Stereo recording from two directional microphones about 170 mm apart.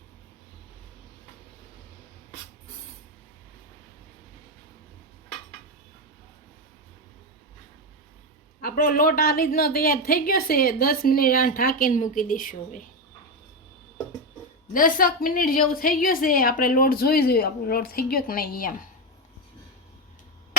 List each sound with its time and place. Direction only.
8.6 s a woman's voice: 55° left (ahead or behind)
14.7 s a woman's voice: 55° left (ahead or behind)